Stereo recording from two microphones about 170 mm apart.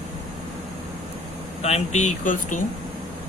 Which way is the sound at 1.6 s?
40° left (ahead or behind).